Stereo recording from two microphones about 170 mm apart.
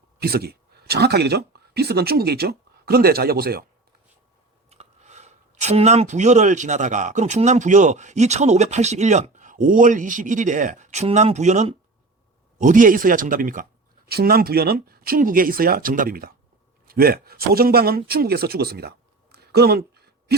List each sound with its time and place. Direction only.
0.2 s speech: 65° right (ahead or behind)
4.7 s speech: 40° right (ahead or behind); by 20.3 s 70° right (ahead or behind)